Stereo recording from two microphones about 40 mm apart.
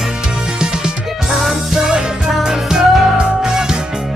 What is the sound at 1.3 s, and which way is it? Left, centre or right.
Music, centre.